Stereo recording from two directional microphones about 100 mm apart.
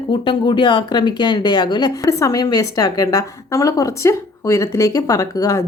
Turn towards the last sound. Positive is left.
turn(degrees=35)  # may be behind; listen again after turning